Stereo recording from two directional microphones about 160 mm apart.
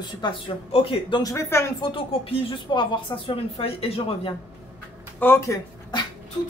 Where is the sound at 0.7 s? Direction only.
35° left (ahead or behind).